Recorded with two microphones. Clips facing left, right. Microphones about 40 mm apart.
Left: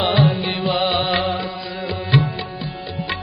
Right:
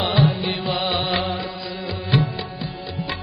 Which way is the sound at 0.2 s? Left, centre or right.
Centre.